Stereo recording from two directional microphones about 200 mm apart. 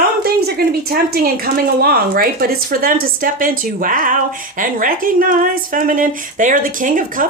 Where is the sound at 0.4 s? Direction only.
50° right (ahead or behind).